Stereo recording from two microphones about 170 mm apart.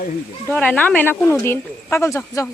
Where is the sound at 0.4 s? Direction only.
10° left (ahead or behind).